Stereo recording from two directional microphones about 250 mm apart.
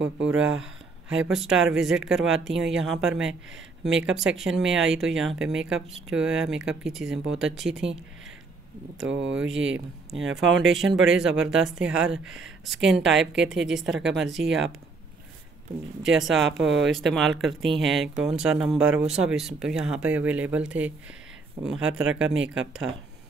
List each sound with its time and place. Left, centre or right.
0.3 s speech: centre
9.0 s speech: right
9.3 s speech: centre
9.6 s speech: right
10.2 s speech: centre
14.2 s speech: right
16.0 s speech: right
16.3 s speech: centre